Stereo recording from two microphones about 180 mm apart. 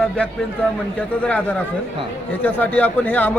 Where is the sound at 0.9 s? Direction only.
10° left (ahead or behind).